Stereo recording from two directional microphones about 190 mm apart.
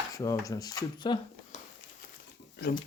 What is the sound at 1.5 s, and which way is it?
Crumpling, 35° left (ahead or behind).